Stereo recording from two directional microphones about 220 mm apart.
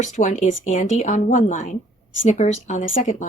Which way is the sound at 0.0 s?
35° left (ahead or behind).